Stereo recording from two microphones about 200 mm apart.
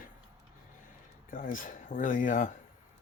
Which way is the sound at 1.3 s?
45° left (ahead or behind).